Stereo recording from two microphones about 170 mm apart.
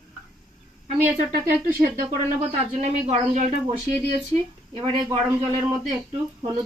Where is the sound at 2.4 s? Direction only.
45° right (ahead or behind).